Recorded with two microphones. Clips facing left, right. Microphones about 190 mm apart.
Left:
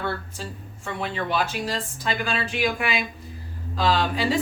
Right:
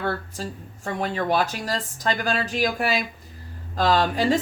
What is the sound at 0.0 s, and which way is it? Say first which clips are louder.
A woman's voice: right 2 dB; 40° right (ahead or behind).